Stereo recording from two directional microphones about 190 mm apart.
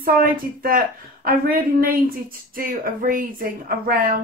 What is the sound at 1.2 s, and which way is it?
Speech, 50° right (ahead or behind).